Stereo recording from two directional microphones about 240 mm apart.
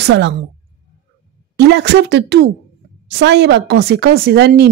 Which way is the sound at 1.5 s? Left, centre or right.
Right.